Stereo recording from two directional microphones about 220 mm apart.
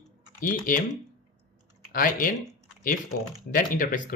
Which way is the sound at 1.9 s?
40° left (ahead or behind).